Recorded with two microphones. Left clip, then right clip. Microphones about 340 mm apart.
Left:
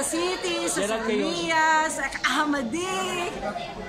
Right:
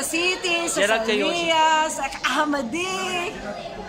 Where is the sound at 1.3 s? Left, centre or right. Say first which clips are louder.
Right 2 dB; centre.